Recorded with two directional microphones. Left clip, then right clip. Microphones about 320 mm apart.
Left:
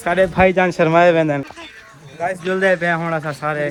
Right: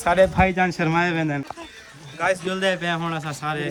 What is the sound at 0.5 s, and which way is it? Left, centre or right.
Speech, centre.